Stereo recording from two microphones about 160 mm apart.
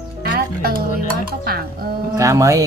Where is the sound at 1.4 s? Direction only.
70° right (ahead or behind).